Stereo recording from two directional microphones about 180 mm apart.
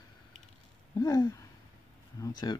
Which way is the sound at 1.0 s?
20° left (ahead or behind).